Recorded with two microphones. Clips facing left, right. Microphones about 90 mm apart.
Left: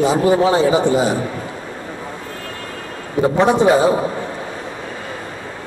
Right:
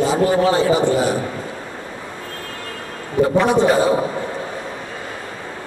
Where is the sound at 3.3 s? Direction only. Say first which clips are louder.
Left 2 dB; 20° left (ahead or behind).